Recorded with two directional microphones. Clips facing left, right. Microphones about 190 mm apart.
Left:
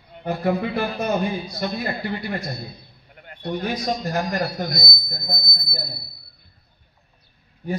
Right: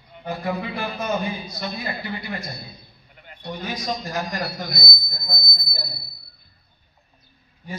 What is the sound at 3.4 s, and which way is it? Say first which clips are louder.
A man's voice: left 5 dB; 55° left (ahead or behind).